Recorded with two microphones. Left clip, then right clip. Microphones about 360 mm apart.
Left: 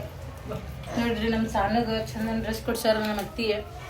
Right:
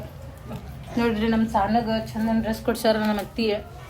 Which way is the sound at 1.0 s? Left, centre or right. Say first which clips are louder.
Right 4 dB; centre.